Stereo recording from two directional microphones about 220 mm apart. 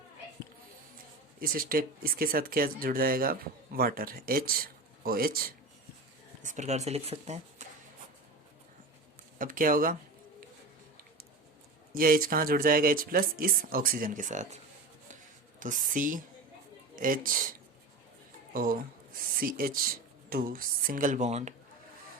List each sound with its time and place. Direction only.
1.4 s speech: 40° right (ahead or behind)
9.4 s speech: 40° right (ahead or behind)
11.9 s speech: 40° right (ahead or behind)
15.6 s speech: 35° right (ahead or behind)
18.5 s speech: 40° right (ahead or behind)